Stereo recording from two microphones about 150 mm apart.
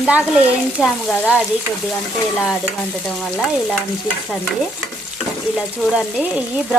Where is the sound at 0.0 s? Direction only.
10° right (ahead or behind).